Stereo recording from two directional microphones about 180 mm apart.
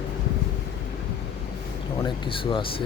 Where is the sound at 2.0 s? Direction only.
25° left (ahead or behind).